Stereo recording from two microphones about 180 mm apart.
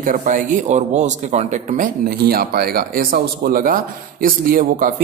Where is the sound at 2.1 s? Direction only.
60° right (ahead or behind).